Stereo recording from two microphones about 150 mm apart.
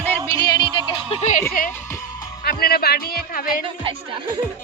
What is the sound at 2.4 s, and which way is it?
A man's voice, 90° left.